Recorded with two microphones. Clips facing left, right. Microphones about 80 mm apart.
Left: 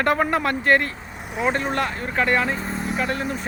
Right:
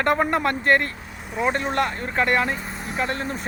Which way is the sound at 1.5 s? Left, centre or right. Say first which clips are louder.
Even; right.